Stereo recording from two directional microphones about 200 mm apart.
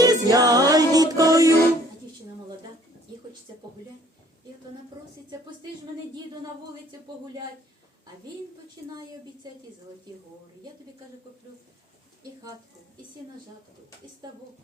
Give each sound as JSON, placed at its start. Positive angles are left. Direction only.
{"t": 0.0, "sound": "music", "side_deg": -20}